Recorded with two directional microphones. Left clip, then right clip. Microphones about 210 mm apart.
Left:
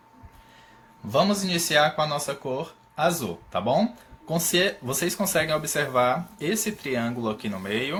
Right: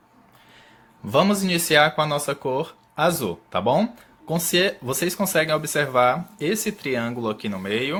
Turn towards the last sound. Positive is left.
turn(degrees=-40)  # may be behind; listen again after turning